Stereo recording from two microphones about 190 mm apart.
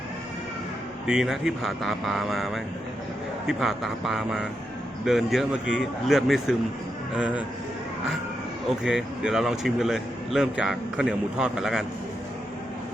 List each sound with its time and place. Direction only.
1.0 s a man's voice: 5° right (ahead or behind)
8.8 s a man's voice: centre (ahead or behind)